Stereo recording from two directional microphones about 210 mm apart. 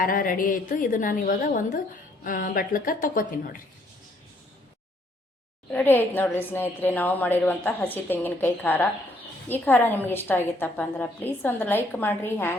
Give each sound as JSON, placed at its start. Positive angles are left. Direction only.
{"t": 0.0, "sound": "a woman's voice", "side_deg": 40}
{"t": 5.7, "sound": "a woman's voice", "side_deg": 10}